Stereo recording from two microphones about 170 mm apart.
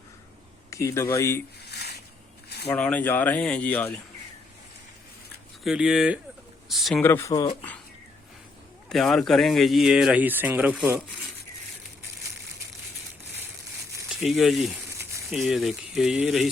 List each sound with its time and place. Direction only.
0.7 s speech: 15° left (ahead or behind)
1.7 s a sound: 70° left (ahead or behind)
2.6 s speech: 10° left (ahead or behind)
5.6 s speech: 5° right (ahead or behind)
7.0 s speech: 15° left (ahead or behind)
8.9 s speech: centre (ahead or behind)
14.2 s speech: centre (ahead or behind)